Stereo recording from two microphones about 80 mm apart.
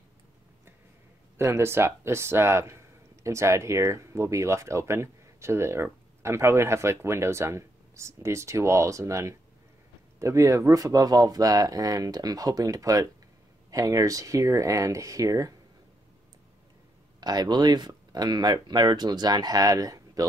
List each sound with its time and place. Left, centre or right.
1.4 s speech: right
17.2 s speech: right